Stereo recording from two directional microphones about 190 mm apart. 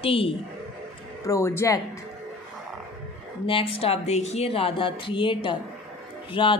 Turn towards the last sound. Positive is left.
turn(degrees=25)  # may be behind; listen again after turning